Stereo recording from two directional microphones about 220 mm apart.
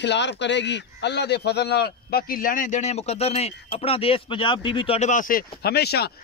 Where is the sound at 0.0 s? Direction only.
50° left (ahead or behind).